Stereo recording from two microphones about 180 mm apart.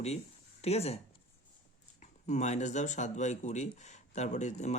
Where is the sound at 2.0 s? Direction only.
40° left (ahead or behind).